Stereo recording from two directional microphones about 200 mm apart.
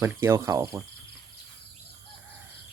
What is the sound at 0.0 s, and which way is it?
Speech, 10° right (ahead or behind).